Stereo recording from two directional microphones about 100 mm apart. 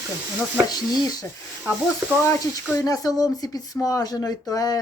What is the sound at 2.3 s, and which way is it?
Speech, 35° left (ahead or behind).